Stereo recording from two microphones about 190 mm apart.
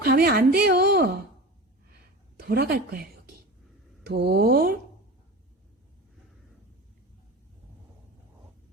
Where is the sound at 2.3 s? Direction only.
55° right (ahead or behind).